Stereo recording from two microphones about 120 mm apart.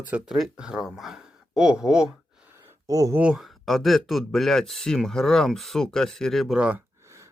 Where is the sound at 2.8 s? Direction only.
30° right (ahead or behind).